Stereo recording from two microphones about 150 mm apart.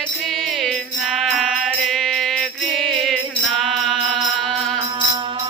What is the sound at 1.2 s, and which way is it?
Music, centre (ahead or behind).